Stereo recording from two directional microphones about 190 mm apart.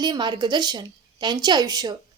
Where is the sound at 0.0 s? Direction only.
25° right (ahead or behind).